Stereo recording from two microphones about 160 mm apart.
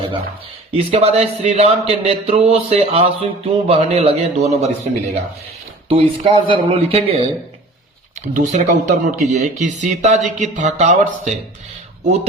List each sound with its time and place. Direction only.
0.7 s speech: 35° right (ahead or behind)
5.9 s speech: 35° right (ahead or behind)
8.3 s speech: 50° right (ahead or behind)